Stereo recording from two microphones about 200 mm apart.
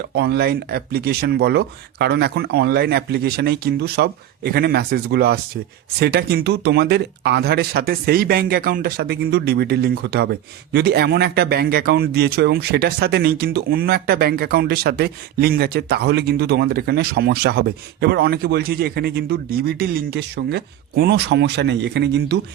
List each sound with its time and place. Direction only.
0.0 s a man's voice: 55° right (ahead or behind)